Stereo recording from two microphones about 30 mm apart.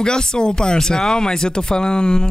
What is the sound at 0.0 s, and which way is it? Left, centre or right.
Speech, left.